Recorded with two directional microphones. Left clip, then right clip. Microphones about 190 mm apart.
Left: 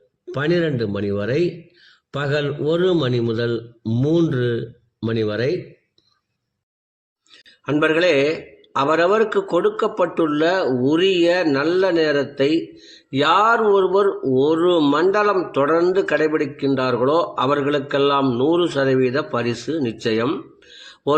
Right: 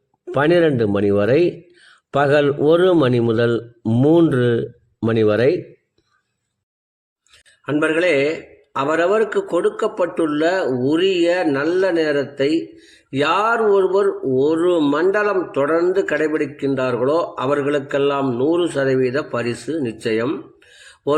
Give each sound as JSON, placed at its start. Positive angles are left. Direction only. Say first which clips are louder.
{"t": 0.3, "sound": "a man's voice", "louder": "right 5 dB", "side_deg": -40}
{"t": 7.3, "sound": "a man's voice", "louder": "even", "side_deg": 10}